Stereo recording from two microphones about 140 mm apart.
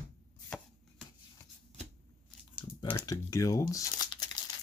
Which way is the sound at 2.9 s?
25° left (ahead or behind).